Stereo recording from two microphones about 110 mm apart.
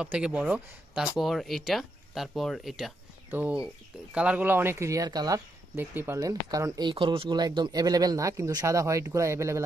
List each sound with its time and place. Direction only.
0.0 s speech: 10° right (ahead or behind)
3.3 s speech: 20° right (ahead or behind)
3.5 s speech: 10° right (ahead or behind); by 5.4 s 35° right (ahead or behind)
5.8 s speech: 20° right (ahead or behind)
6.1 s speech: 30° right (ahead or behind)
6.9 s speech: 50° right (ahead or behind); by 9.6 s 25° right (ahead or behind)